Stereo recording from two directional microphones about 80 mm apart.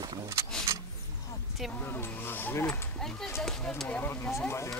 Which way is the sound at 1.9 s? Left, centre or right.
Left.